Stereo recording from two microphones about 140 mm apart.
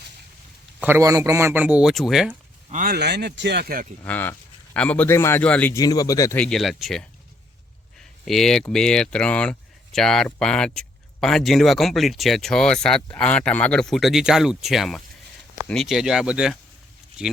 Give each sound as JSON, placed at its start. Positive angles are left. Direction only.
{"t": 0.8, "sound": "speech", "side_deg": -15}
{"t": 2.7, "sound": "speech", "side_deg": -85}
{"t": 4.0, "sound": "a man's voice", "side_deg": 15}
{"t": 5.7, "sound": "speech", "side_deg": 25}
{"t": 6.3, "sound": "speech", "side_deg": 5}
{"t": 7.9, "sound": "a sound", "side_deg": 0}
{"t": 8.7, "sound": "speech", "side_deg": 5}